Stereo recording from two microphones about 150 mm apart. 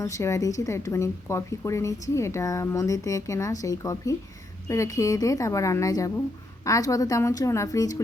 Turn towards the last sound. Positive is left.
turn(degrees=25)  # may be behind; listen again after turning